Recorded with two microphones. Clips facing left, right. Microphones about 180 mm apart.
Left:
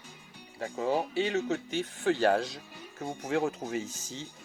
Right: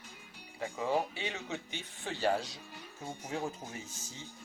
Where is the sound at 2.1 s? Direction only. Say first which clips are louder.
Left 6 dB; 65° left (ahead or behind).